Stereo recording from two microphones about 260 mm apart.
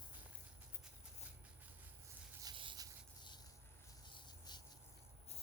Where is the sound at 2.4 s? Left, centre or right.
Centre.